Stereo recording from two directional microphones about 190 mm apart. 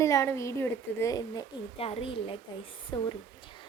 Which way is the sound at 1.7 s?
30° left (ahead or behind).